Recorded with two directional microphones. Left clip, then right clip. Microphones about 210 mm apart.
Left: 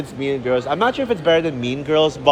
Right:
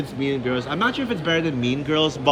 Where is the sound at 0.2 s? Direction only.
20° left (ahead or behind).